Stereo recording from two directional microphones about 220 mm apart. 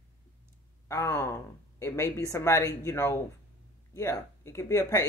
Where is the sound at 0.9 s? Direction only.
10° left (ahead or behind).